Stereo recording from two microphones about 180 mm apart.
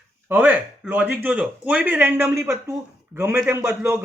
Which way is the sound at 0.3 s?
10° right (ahead or behind).